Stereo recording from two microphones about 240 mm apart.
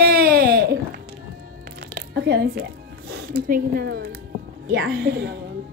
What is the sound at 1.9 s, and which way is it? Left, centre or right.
A woman's voice, right.